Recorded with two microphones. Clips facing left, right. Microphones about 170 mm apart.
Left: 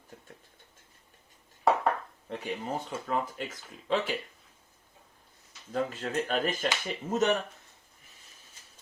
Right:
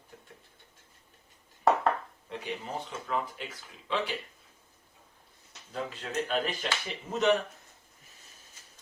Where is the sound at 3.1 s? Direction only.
45° left (ahead or behind).